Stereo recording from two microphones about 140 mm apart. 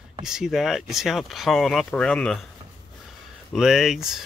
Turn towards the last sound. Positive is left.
turn(degrees=-5)  # may be behind; listen again after turning